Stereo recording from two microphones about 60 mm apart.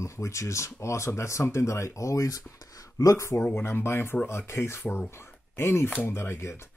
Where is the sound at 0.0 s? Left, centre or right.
Left.